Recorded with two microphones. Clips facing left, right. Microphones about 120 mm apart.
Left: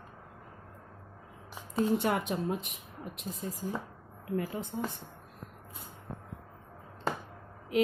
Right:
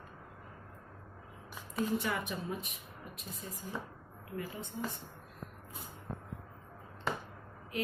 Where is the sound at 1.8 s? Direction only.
65° left (ahead or behind).